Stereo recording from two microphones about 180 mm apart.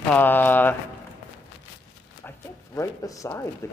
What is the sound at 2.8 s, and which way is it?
A man's voice, 15° left (ahead or behind).